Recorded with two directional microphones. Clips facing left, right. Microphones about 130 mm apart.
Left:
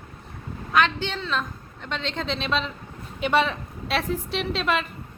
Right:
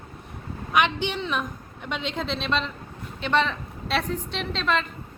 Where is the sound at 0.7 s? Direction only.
15° right (ahead or behind); by 4.8 s 5° left (ahead or behind).